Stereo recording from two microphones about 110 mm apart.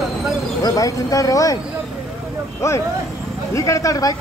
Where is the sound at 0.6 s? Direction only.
30° left (ahead or behind).